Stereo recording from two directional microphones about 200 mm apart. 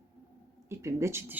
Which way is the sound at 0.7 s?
15° right (ahead or behind).